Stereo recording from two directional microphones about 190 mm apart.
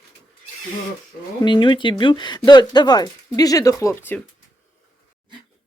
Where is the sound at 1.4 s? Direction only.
25° left (ahead or behind).